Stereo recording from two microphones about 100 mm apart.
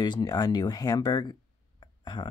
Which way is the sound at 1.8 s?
50° left (ahead or behind).